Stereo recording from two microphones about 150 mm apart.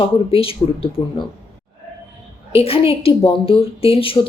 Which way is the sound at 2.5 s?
40° left (ahead or behind).